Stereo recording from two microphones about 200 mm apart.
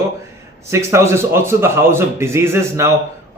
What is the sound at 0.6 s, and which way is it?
Speech, 15° right (ahead or behind).